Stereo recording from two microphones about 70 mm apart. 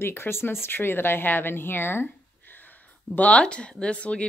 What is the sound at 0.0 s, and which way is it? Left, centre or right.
Speech, left.